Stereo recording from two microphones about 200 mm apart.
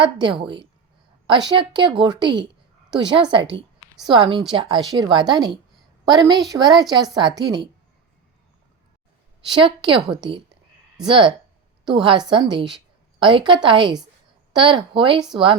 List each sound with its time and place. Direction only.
0.0 s speech: 25° right (ahead or behind)
9.5 s a woman's voice: 25° right (ahead or behind)